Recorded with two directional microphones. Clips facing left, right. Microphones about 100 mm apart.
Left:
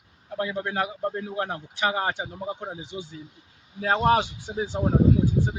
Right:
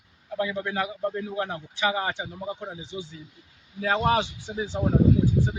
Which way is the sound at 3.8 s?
40° left (ahead or behind).